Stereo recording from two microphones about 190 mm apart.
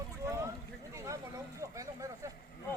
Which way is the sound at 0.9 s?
15° right (ahead or behind).